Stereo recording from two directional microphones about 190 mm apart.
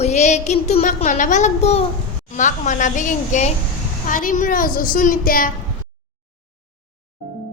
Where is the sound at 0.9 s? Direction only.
40° left (ahead or behind).